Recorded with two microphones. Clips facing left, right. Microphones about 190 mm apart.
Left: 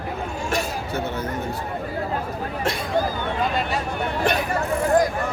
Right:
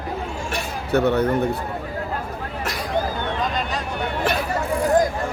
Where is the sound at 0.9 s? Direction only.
65° right (ahead or behind).